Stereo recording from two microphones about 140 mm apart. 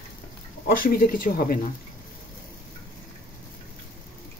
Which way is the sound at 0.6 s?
80° left.